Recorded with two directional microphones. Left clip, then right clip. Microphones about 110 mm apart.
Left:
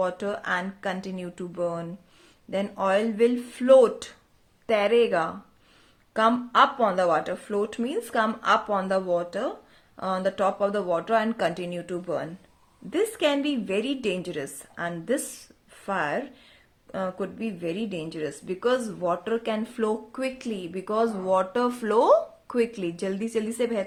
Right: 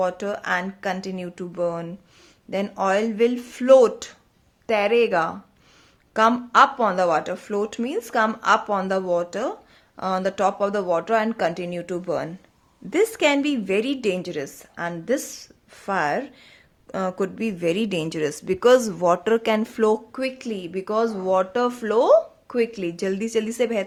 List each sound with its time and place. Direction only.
0.0 s speech: 25° right (ahead or behind); by 16.2 s 40° right (ahead or behind)
16.9 s speech: 70° right (ahead or behind); by 20.0 s 50° right (ahead or behind)
20.1 s speech: 25° right (ahead or behind)